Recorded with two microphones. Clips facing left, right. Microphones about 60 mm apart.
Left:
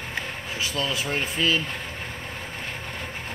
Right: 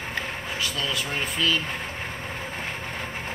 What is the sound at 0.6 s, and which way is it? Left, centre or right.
Speech, centre.